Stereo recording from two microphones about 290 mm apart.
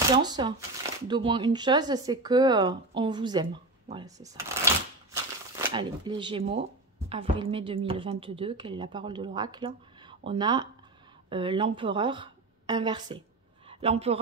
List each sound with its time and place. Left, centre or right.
0.1 s a woman's voice: centre